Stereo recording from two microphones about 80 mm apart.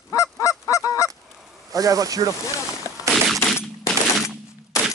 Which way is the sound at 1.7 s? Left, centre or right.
Right.